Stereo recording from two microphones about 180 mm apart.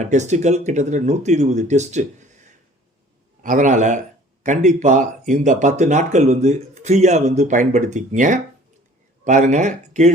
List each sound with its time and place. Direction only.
0.0 s speech: 40° right (ahead or behind)
3.4 s a man's voice: 45° right (ahead or behind)